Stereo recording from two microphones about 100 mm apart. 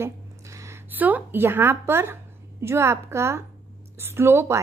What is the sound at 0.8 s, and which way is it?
A woman's voice, 15° right (ahead or behind).